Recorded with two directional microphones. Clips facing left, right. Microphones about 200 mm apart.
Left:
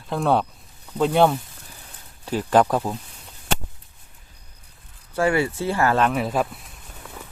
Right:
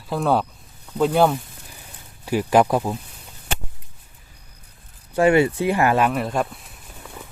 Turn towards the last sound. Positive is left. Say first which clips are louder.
# right 1 dB
turn(degrees=-5)  # may be behind; listen again after turning